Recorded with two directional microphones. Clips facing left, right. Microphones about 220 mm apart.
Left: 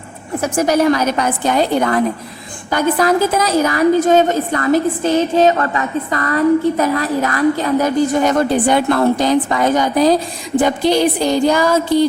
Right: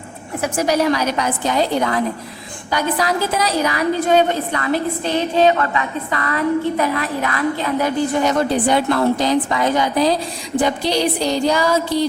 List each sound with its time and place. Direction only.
0.4 s a woman's voice: 50° left (ahead or behind)